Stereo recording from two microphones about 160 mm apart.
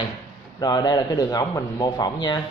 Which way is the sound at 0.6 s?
25° left (ahead or behind).